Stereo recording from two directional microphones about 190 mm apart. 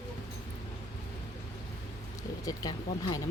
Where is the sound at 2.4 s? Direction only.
20° left (ahead or behind).